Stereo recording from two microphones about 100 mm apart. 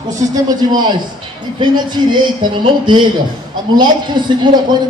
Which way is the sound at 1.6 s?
50° right (ahead or behind).